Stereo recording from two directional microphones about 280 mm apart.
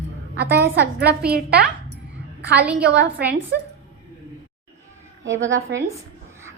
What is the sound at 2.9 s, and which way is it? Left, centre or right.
Speech, right.